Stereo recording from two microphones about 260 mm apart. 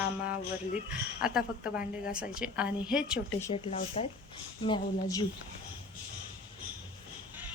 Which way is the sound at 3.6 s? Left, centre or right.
Left.